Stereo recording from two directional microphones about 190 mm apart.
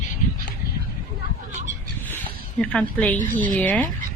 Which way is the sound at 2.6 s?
5° left (ahead or behind).